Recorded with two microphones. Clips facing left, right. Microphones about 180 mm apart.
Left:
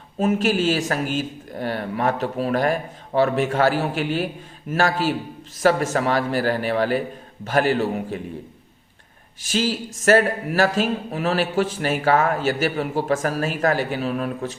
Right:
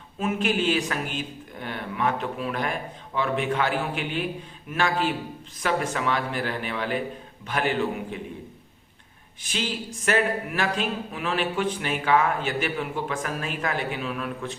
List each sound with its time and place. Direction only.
0.2 s speech: 40° left (ahead or behind)
9.5 s speech: 40° left (ahead or behind)